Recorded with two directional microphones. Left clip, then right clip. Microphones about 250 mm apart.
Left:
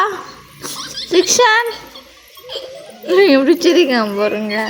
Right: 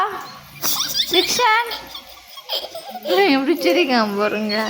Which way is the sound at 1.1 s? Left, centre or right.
Centre.